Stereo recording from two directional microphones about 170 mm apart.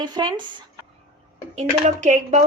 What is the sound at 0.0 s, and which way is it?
Speech, 25° right (ahead or behind).